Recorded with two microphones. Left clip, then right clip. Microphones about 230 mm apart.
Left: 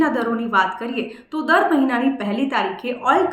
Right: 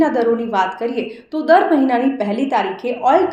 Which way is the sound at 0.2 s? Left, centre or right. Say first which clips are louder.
Right 3 dB; centre.